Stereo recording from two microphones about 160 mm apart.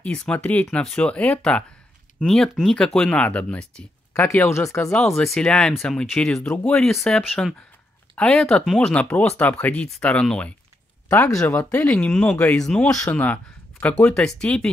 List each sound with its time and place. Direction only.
0.0 s speech: 5° left (ahead or behind)
4.9 s speech: 5° left (ahead or behind)